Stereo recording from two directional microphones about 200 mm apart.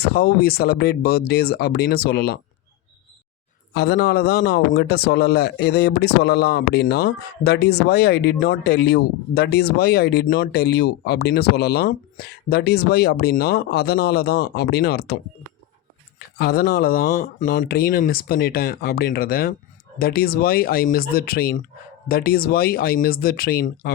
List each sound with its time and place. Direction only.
0.0 s a man's voice: 50° left (ahead or behind)
3.8 s a man's voice: 55° left (ahead or behind)